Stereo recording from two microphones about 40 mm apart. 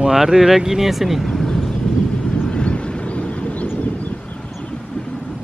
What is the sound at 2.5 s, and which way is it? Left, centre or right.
Vehicle, left.